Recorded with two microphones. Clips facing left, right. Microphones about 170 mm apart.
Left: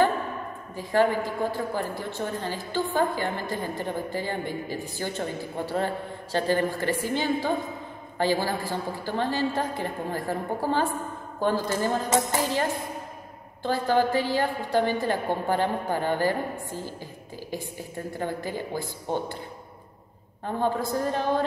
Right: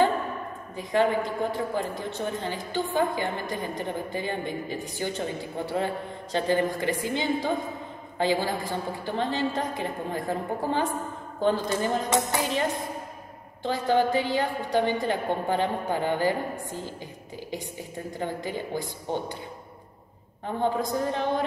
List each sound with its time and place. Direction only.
0.7 s a woman's voice: 20° right (ahead or behind)
6.3 s a woman's voice: 20° right (ahead or behind)
20.6 s a woman's voice: 20° right (ahead or behind)